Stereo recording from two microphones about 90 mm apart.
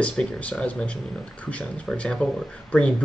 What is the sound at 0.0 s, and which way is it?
Speech, 15° left (ahead or behind).